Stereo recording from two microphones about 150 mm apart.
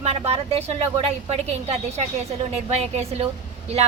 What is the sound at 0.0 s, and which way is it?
A woman's voice, 45° right (ahead or behind).